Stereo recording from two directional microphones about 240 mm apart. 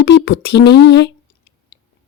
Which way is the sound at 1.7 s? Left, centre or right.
Left.